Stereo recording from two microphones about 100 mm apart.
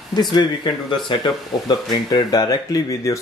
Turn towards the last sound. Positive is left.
turn(degrees=35)  # may be behind; listen again after turning